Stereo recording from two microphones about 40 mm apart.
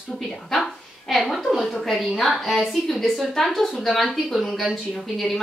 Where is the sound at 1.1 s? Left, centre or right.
Centre.